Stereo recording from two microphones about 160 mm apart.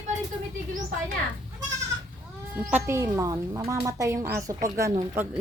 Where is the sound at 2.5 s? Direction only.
10° right (ahead or behind).